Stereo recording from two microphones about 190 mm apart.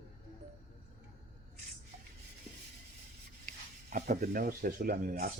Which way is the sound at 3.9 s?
40° right (ahead or behind).